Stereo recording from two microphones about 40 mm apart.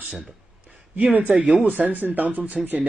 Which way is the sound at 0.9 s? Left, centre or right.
Right.